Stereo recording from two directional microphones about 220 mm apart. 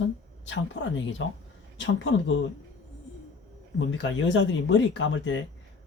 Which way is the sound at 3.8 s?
60° left (ahead or behind).